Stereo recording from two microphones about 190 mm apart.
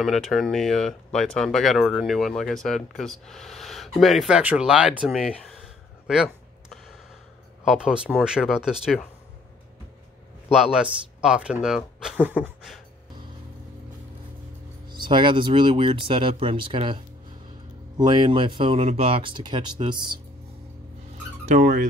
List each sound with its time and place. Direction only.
0.0 s speech: centre (ahead or behind)
10.5 s speech: 5° right (ahead or behind)
14.9 s speech: 25° right (ahead or behind)
21.5 s speech: 50° right (ahead or behind)